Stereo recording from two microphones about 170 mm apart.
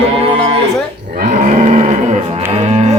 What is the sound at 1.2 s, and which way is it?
Roaring cats, 40° right (ahead or behind).